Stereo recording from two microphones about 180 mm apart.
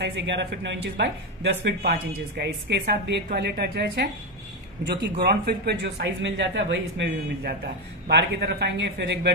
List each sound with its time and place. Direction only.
0.0 s speech: 75° right (ahead or behind)
5.2 s speech: 60° right (ahead or behind); by 7.5 s 80° right
8.1 s speech: 65° right (ahead or behind)